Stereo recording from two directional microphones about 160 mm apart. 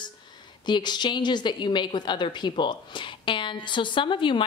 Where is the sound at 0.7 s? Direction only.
30° left (ahead or behind).